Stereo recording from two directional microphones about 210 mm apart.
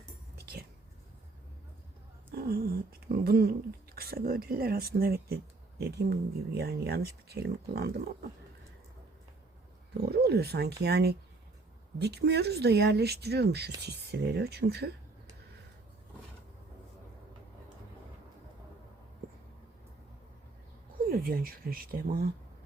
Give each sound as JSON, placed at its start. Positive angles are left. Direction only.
{"t": 0.3, "sound": "whispering", "side_deg": -50}
{"t": 2.3, "sound": "a sound", "side_deg": -45}
{"t": 3.9, "sound": "speech", "side_deg": -45}
{"t": 10.1, "sound": "speech", "side_deg": -50}
{"t": 21.1, "sound": "speech", "side_deg": -45}